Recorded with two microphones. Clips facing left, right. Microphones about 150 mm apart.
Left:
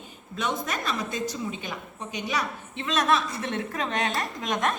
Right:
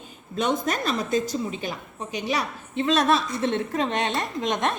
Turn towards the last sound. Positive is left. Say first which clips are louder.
# right 2 dB
turn(degrees=-25)  # may be behind; listen again after turning